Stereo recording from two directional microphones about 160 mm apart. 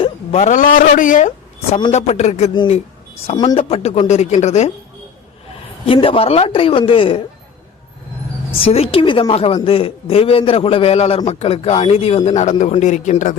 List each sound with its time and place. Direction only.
0.0 s speech: 40° left (ahead or behind)
1.9 s speech: 45° left (ahead or behind)
3.5 s speech: 40° left (ahead or behind)
5.8 s a man's voice: 35° left (ahead or behind)
8.5 s a man's voice: 35° left (ahead or behind)